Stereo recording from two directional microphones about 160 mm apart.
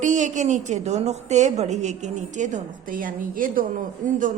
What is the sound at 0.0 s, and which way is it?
A woman's voice, 50° right (ahead or behind).